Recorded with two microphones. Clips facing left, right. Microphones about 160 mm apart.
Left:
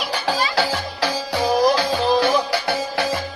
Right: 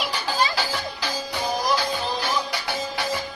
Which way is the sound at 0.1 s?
65° left (ahead or behind).